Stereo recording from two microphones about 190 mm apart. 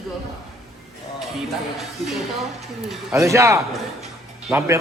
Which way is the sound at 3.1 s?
15° right (ahead or behind).